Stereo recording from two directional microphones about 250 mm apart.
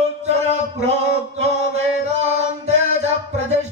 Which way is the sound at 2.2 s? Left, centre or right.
Right.